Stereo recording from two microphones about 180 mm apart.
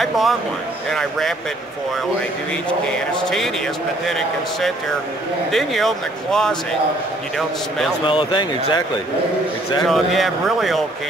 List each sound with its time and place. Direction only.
0.0 s speech: centre (ahead or behind)
2.9 s speech: 5° left (ahead or behind)
8.0 s speech: 25° left (ahead or behind)
9.8 s speech: centre (ahead or behind)